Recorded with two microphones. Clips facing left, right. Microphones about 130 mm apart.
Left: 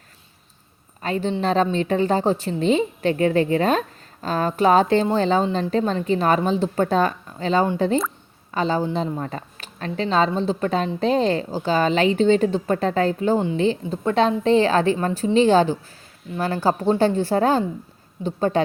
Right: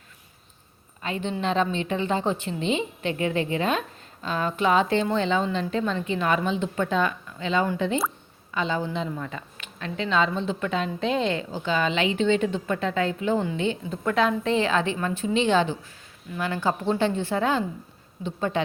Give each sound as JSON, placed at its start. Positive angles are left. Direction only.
{"t": 1.0, "sound": "a woman's voice", "side_deg": 40}